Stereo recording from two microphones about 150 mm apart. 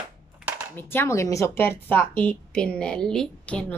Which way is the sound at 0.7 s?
15° left (ahead or behind).